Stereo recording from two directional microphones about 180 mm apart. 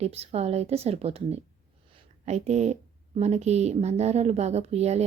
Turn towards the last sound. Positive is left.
turn(degrees=-35)  # may be behind; listen again after turning